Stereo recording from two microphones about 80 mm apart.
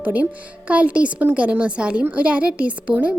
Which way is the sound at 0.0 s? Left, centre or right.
Centre.